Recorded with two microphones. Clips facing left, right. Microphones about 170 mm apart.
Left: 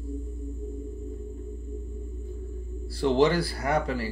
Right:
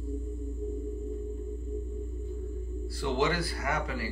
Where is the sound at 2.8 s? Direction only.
35° left (ahead or behind).